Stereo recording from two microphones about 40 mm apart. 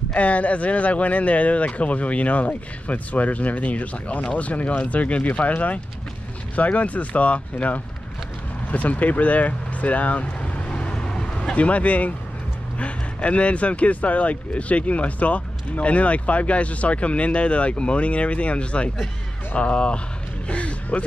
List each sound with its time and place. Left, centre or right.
0.1 s speech: left
10.7 s vehicle: left
11.5 s speech: left